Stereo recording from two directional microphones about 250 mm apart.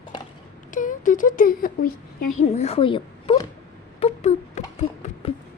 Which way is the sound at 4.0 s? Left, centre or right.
Left.